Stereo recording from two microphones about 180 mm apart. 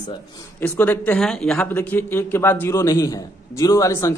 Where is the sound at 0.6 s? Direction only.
10° left (ahead or behind).